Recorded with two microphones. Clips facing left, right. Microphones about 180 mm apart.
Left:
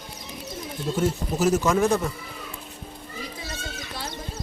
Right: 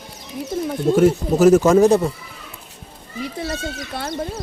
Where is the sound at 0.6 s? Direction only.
65° right (ahead or behind).